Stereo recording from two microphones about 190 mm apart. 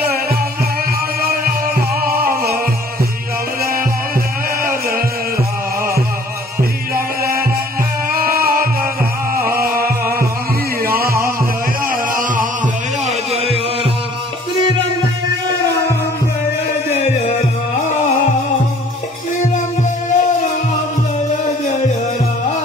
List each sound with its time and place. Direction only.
0.0 s music: 55° right (ahead or behind)
2.2 s music: 50° right (ahead or behind)
4.6 s chant: 50° right (ahead or behind)
8.1 s music: 50° right (ahead or behind)
13.0 s a sound: 35° right (ahead or behind)
16.9 s music: 35° left (ahead or behind)
19.4 s music: 40° left (ahead or behind)